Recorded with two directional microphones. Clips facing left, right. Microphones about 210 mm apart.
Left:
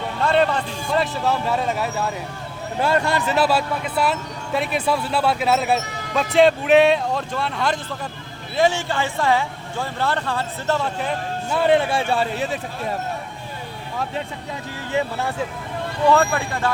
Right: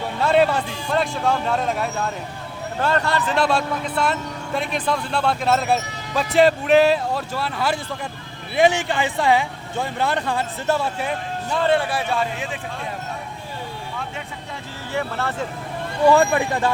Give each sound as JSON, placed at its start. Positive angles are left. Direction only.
{"t": 0.3, "sound": "speech", "side_deg": -5}
{"t": 2.8, "sound": "speech", "side_deg": 10}
{"t": 8.5, "sound": "speech", "side_deg": -15}
{"t": 11.5, "sound": "speech", "side_deg": 15}
{"t": 14.9, "sound": "speech", "side_deg": 15}
{"t": 16.0, "sound": "speech", "side_deg": -15}